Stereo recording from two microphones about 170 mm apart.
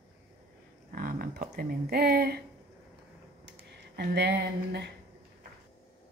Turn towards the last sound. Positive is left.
turn(degrees=-70)  # may be behind; listen again after turning